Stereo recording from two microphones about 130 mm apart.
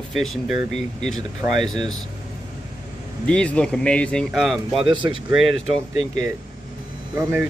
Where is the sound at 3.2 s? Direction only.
10° left (ahead or behind).